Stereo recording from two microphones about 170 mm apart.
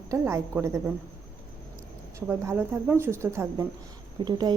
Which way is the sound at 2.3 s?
10° right (ahead or behind).